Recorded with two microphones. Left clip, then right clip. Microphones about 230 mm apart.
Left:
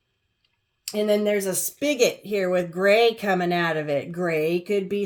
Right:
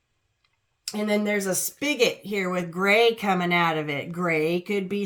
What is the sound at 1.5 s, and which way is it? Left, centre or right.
Speech, right.